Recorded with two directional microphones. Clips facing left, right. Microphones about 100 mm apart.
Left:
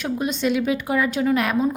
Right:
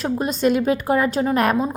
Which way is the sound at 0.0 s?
40° right (ahead or behind).